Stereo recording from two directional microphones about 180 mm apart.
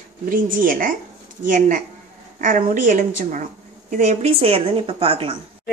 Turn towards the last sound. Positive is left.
turn(degrees=-30)  # may be behind; listen again after turning